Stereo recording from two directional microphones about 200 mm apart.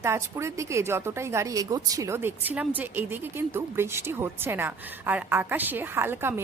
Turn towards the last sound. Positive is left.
turn(degrees=-10)  # may be behind; listen again after turning